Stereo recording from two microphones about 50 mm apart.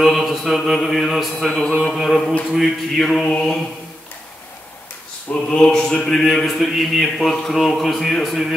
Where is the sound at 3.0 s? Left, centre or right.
Centre.